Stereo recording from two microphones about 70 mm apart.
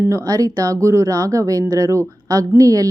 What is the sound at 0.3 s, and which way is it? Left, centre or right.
A woman's voice, right.